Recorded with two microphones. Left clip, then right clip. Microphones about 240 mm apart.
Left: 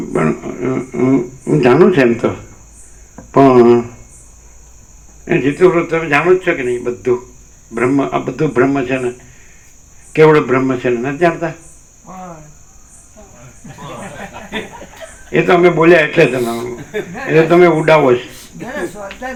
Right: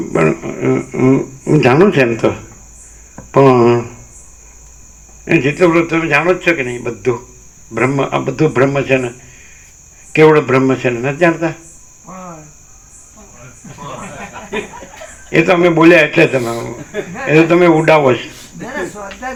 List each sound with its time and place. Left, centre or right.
0.1 s speech: right
3.3 s speech: right
5.2 s speech: right
10.1 s speech: right
15.3 s speech: right